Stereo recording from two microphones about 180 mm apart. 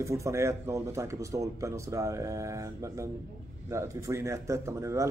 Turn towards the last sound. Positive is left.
turn(degrees=-15)  # may be behind; listen again after turning